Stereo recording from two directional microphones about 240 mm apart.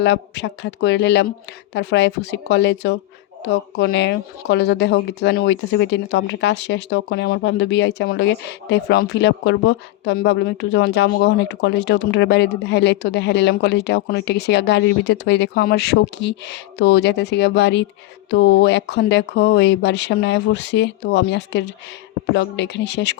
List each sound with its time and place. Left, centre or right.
0.0 s speech: left